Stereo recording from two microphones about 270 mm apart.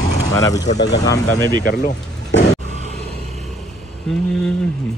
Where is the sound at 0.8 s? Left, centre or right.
Left.